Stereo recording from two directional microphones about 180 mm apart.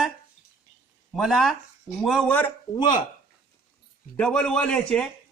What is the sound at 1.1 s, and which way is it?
Speech, centre (ahead or behind).